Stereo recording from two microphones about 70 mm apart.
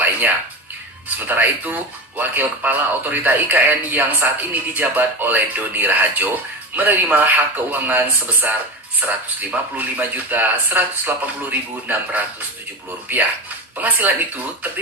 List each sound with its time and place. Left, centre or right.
1.0 s speech: right